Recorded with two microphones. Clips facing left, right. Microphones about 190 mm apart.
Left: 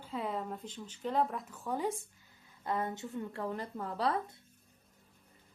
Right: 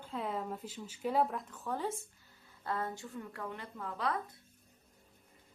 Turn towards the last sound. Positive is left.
turn(degrees=35)  # may be behind; listen again after turning